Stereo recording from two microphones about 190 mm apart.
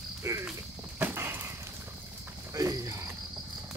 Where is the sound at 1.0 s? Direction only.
10° right (ahead or behind).